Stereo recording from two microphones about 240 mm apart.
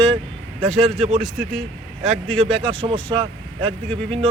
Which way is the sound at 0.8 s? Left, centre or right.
Right.